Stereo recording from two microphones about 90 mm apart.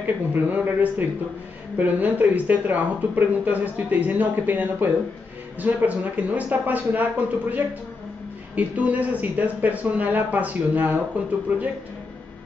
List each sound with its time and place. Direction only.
0.0 s speech: 20° right (ahead or behind)
8.5 s speech: 15° right (ahead or behind)